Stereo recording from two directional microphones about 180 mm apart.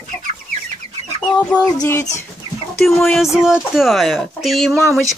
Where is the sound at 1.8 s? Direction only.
15° left (ahead or behind).